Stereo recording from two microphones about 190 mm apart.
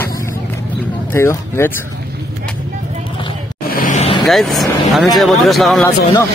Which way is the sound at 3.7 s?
45° left (ahead or behind).